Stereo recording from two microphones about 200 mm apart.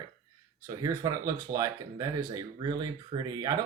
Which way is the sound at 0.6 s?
15° right (ahead or behind).